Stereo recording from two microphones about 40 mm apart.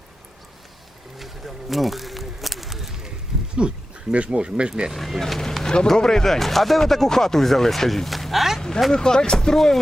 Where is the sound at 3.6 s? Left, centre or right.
Right.